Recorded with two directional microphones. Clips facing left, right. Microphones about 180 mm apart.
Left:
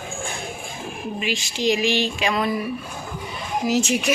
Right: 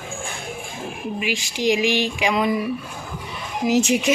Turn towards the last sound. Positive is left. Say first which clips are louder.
# right 3 dB
turn(degrees=-15)  # may be behind; listen again after turning